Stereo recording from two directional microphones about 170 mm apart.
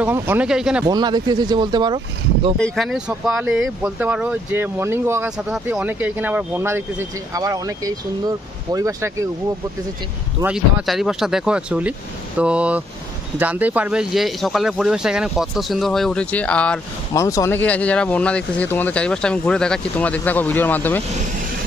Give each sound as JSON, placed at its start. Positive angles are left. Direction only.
{"t": 0.0, "sound": "speech", "side_deg": -10}
{"t": 0.8, "sound": "speech", "side_deg": -25}
{"t": 2.6, "sound": "speech", "side_deg": 0}
{"t": 10.4, "sound": "speech", "side_deg": -5}
{"t": 17.1, "sound": "speech", "side_deg": 20}